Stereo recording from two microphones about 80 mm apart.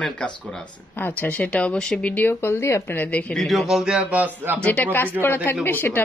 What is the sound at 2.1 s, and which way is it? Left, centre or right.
Speech, left.